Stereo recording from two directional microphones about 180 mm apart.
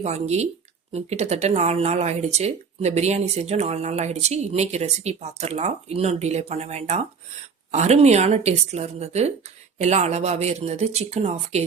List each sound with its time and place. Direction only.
0.0 s speech: 35° right (ahead or behind)